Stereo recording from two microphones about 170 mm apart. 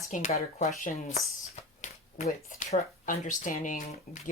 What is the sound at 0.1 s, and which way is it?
Speech, 45° left (ahead or behind).